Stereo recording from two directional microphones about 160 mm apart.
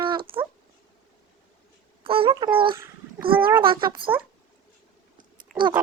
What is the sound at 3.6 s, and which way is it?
Speech, 30° right (ahead or behind).